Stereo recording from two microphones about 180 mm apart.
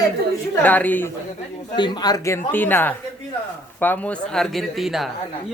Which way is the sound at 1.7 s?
25° left (ahead or behind).